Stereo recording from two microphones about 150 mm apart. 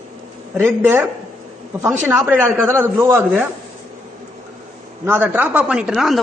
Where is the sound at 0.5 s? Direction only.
15° right (ahead or behind).